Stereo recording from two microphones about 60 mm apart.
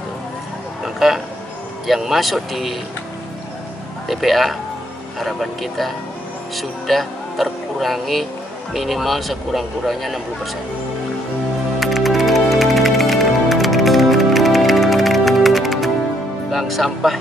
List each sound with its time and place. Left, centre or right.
0.8 s a sound: centre
1.9 s speech: centre
4.1 s speech: centre
11.8 s music: centre
16.5 s speech: centre